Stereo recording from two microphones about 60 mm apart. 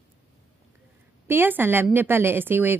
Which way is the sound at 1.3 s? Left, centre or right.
Right.